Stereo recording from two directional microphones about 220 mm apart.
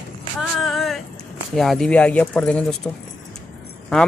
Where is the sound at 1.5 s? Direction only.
Centre (ahead or behind).